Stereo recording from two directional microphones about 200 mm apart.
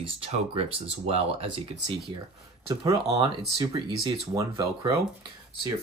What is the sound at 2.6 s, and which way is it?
Speech, 25° right (ahead or behind).